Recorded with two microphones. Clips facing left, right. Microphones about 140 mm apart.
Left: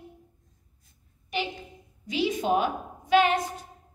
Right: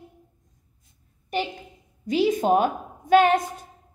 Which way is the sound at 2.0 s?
50° right (ahead or behind).